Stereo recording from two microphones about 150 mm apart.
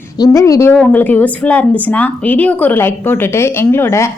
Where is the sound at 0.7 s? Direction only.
10° left (ahead or behind).